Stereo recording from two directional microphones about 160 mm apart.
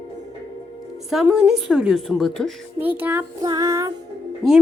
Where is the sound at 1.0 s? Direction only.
5° right (ahead or behind).